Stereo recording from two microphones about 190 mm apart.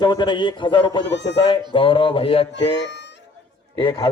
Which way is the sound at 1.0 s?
70° left (ahead or behind).